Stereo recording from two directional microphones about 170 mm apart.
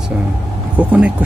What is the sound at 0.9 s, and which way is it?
Speech, 10° right (ahead or behind).